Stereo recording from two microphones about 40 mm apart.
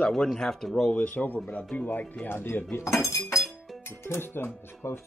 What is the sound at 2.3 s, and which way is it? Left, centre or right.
Speech, left.